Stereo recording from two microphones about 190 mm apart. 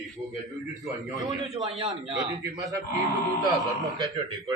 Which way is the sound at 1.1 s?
15° right (ahead or behind).